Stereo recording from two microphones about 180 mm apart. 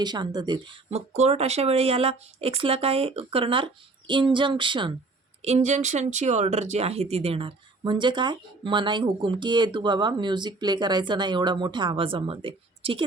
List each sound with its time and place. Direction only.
0.0 s speech: 25° right (ahead or behind)
5.4 s speech: 35° right (ahead or behind)